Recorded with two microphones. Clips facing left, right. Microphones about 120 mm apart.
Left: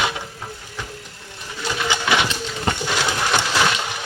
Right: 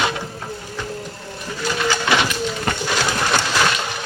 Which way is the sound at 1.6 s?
15° left (ahead or behind).